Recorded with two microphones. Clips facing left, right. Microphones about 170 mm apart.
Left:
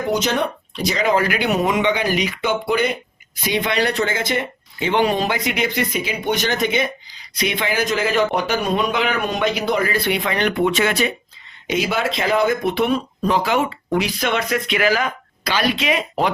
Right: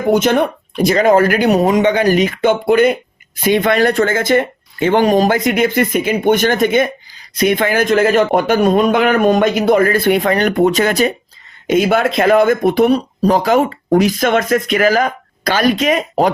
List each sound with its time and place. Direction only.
0.1 s speech: 55° right (ahead or behind)
11.7 s speech: 50° right (ahead or behind)